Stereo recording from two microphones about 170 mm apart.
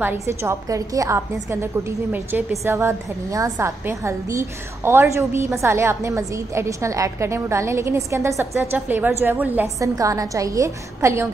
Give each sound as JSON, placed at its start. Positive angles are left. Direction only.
{"t": 0.0, "sound": "a woman's voice", "side_deg": -15}